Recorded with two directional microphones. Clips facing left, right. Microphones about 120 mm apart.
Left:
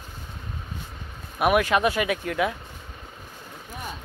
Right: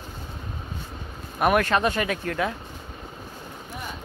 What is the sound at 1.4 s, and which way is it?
Speech, 5° left (ahead or behind).